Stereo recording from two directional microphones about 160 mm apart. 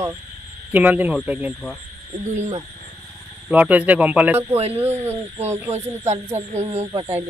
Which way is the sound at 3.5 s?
10° right (ahead or behind).